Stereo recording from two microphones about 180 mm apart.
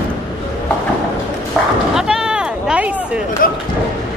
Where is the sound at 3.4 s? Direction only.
50° left (ahead or behind).